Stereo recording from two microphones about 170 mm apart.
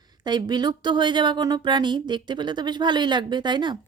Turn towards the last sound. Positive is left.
turn(degrees=-25)  # may be behind; listen again after turning